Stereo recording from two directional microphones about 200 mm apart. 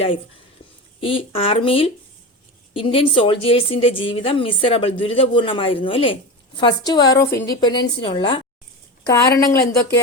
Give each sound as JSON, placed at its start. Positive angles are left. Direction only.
{"t": 1.0, "sound": "a woman's voice", "side_deg": 25}
{"t": 9.0, "sound": "speech", "side_deg": 15}